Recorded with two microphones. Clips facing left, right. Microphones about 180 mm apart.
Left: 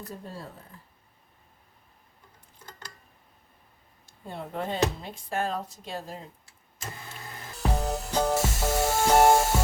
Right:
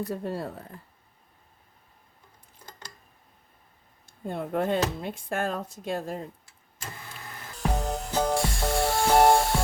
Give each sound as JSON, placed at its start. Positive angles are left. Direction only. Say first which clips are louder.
{"t": 0.1, "sound": "speech", "louder": "right 9 dB", "side_deg": -65}
{"t": 4.0, "sound": "speech", "louder": "right 6 dB", "side_deg": -50}
{"t": 7.8, "sound": "music", "louder": "left 1 dB", "side_deg": 5}